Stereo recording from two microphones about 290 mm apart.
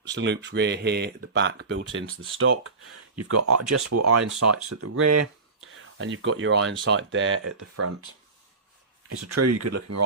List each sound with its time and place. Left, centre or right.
0.1 s speech: right
5.7 s speech: right
7.6 s speech: right
9.0 s speech: right